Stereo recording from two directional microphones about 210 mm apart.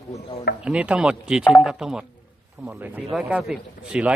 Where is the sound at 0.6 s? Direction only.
5° right (ahead or behind).